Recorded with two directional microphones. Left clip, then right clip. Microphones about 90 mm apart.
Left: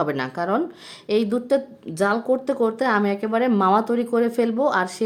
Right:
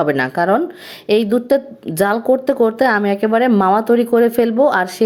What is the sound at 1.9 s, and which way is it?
Speech, 50° right (ahead or behind).